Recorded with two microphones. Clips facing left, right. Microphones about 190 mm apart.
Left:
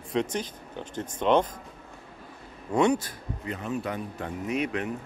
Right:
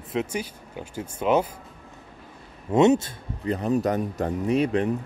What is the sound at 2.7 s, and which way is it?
Speech, 25° right (ahead or behind).